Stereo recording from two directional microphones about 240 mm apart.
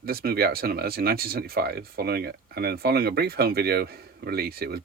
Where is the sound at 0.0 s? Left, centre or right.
Right.